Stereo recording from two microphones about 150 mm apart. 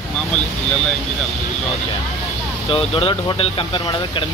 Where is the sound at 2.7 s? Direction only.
40° left (ahead or behind).